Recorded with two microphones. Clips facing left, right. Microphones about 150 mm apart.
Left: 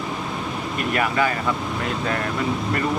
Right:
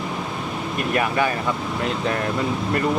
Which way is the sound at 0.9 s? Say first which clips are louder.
Right 1 dB; 20° right (ahead or behind).